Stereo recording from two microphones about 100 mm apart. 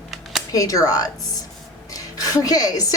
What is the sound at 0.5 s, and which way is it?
Speech, 35° left (ahead or behind).